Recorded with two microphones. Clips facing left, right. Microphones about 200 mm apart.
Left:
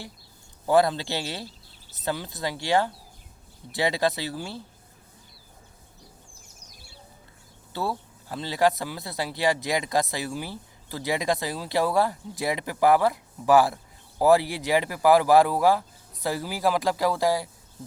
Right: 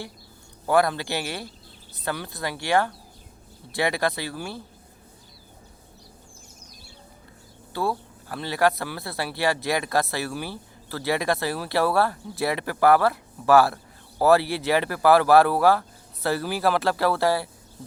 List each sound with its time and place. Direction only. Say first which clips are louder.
0.7 s speech: even; 20° left (ahead or behind)
7.7 s speech: right 3 dB; 20° left (ahead or behind)